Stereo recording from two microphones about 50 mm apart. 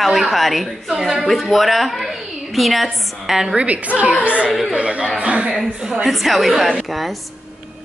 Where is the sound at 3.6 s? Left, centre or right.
Right.